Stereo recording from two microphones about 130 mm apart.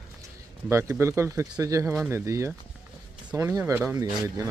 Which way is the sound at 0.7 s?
20° right (ahead or behind).